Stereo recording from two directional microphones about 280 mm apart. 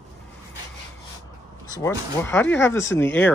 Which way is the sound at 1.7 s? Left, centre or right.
Centre.